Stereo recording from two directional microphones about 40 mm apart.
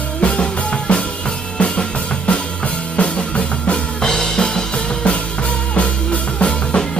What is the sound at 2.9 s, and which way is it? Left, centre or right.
Music, left.